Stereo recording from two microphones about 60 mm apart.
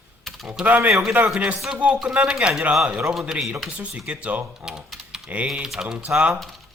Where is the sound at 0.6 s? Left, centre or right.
Right.